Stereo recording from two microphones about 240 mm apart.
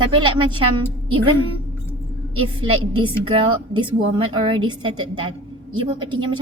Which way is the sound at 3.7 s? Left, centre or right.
Right.